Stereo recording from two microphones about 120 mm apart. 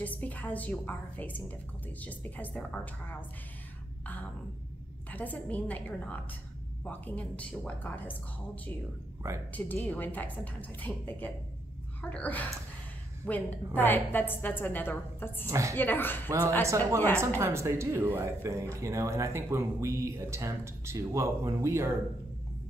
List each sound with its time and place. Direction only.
0.0 s a woman's voice: 15° left (ahead or behind)
5.1 s a woman's voice: 15° left (ahead or behind)
9.5 s a woman's voice: 15° left (ahead or behind)
15.4 s speech: 25° right (ahead or behind)
15.7 s a woman's voice: 15° left (ahead or behind)
16.6 s speech: 25° right (ahead or behind)